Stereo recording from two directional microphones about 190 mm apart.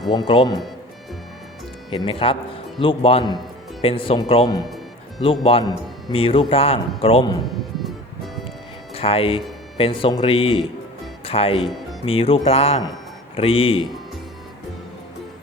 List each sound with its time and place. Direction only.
0.1 s a man's voice: 25° left (ahead or behind)
1.9 s a man's voice: 25° left (ahead or behind)
9.0 s a man's voice: 30° left (ahead or behind)